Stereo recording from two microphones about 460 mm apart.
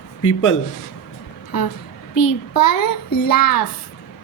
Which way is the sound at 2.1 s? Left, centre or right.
Left.